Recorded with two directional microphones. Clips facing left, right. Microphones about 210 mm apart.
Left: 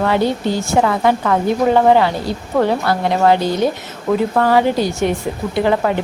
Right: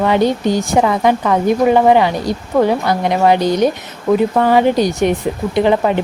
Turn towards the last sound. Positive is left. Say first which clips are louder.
# right 3 dB
turn(degrees=-20)  # may be behind; listen again after turning